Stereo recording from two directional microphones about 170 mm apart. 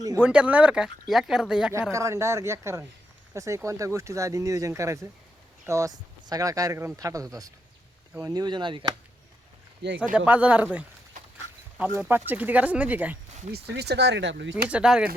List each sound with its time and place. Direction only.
0.2 s speech: 5° right (ahead or behind)
1.9 s speech: 15° right (ahead or behind)
10.0 s speech: 5° right (ahead or behind)
11.9 s speech: 10° right (ahead or behind)
13.5 s speech: 75° right (ahead or behind); by 14.5 s 90° right
14.7 s speech: 5° right (ahead or behind)